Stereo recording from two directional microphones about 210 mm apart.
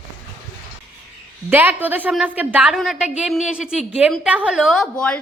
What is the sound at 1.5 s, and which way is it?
A woman's voice, 10° right (ahead or behind).